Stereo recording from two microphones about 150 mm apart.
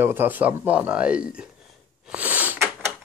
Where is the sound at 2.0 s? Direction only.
10° right (ahead or behind).